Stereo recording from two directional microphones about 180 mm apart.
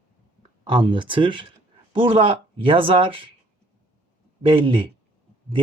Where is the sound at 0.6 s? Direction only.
30° right (ahead or behind).